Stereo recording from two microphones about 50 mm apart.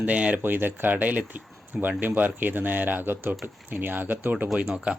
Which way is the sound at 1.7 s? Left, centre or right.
Right.